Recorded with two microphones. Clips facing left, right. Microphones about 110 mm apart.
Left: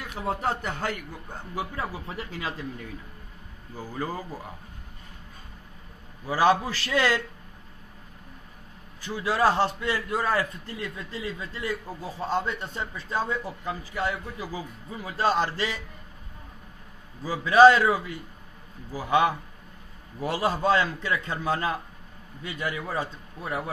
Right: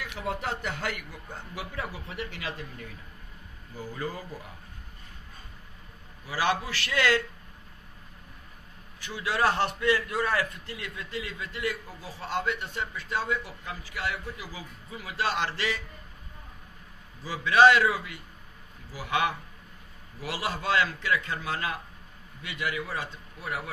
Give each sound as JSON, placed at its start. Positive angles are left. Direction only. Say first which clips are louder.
{"t": 0.0, "sound": "a man's voice", "louder": "left 4 dB", "side_deg": 35}
{"t": 1.8, "sound": "a man's voice", "louder": "left 2 dB", "side_deg": 35}
{"t": 3.7, "sound": "a man's voice", "louder": "left 3 dB", "side_deg": 40}
{"t": 6.2, "sound": "a man's voice", "louder": "left 6 dB", "side_deg": 35}
{"t": 9.0, "sound": "a man's voice", "louder": "left 3 dB", "side_deg": 35}
{"t": 9.9, "sound": "a man's voice", "louder": "left 1 dB", "side_deg": 15}
{"t": 10.3, "sound": "a man's voice", "louder": "left 2 dB", "side_deg": 30}
{"t": 17.2, "sound": "a man's voice", "louder": "left 4 dB", "side_deg": 35}
{"t": 20.3, "sound": "a man's voice", "louder": "left 4 dB", "side_deg": 35}